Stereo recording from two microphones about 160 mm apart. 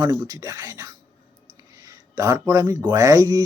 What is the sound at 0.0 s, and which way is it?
Speech, 25° right (ahead or behind).